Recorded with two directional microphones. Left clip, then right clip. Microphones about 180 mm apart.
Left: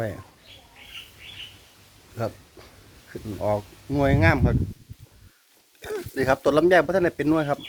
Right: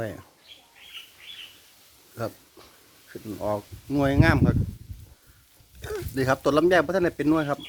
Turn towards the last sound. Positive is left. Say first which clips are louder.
# left 1 dB
turn(degrees=-5)  # may be behind; listen again after turning